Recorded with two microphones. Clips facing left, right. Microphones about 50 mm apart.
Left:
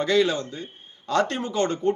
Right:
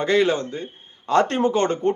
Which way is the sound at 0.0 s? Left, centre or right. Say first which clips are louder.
Right 2 dB; right.